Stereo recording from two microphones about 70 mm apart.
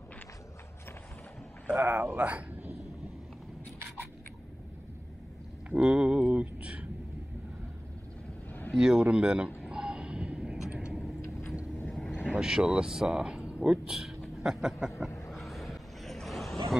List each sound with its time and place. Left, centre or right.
1.8 s speech: right
5.7 s a sound: centre
8.5 s vehicle: left
8.7 s speech: centre
9.7 s a sound: centre
10.9 s vehicle: centre
12.3 s speech: centre
15.0 s vehicle: left
15.3 s vehicle: centre